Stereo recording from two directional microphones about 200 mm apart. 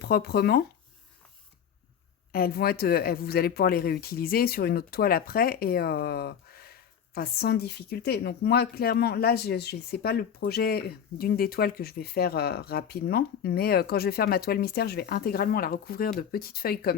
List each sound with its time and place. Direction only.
0.0 s speech: 50° left (ahead or behind)
2.3 s speech: 50° left (ahead or behind)